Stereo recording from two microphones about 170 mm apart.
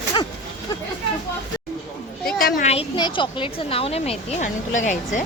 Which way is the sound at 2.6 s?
35° left (ahead or behind).